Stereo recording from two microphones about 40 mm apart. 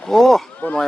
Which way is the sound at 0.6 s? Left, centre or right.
Left.